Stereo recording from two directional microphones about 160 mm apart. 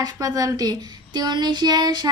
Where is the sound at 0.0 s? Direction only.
25° right (ahead or behind).